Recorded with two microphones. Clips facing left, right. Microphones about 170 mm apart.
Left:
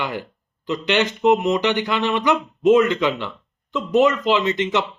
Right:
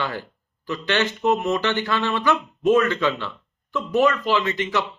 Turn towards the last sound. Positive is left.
turn(degrees=20)  # may be behind; listen again after turning